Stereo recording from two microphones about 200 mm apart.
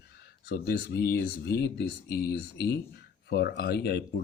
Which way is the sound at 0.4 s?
55° left (ahead or behind).